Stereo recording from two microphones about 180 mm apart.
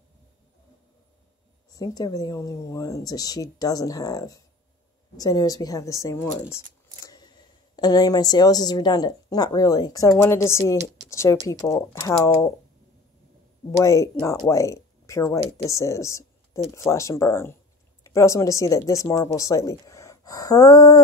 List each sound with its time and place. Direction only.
1.7 s a woman's voice: 20° left (ahead or behind)
13.7 s speech: 15° left (ahead or behind)